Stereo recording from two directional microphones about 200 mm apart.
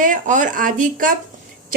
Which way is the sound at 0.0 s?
40° right (ahead or behind).